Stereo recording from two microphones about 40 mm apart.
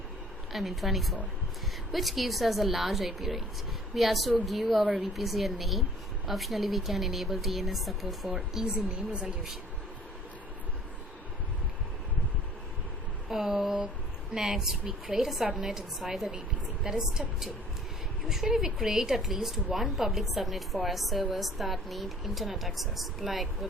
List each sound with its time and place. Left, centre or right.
0.5 s a woman's voice: centre
13.2 s a sound: centre
14.3 s a woman's voice: centre
16.8 s a woman's voice: centre
18.3 s a woman's voice: centre